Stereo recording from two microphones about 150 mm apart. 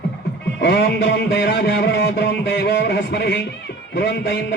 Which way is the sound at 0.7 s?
90° left.